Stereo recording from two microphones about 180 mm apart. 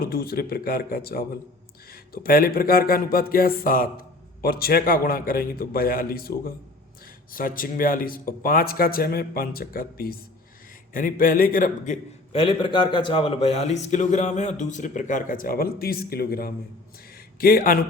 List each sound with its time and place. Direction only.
0.0 s a sound: 55° left (ahead or behind)
7.3 s speech: 50° left (ahead or behind)
12.3 s a man's voice: 30° left (ahead or behind); by 17.8 s 50° left (ahead or behind)